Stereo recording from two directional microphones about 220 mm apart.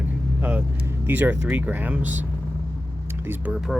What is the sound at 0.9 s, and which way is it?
Speech, 10° right (ahead or behind).